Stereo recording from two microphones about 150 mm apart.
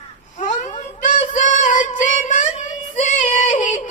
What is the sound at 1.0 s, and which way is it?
Female singing, 55° left (ahead or behind).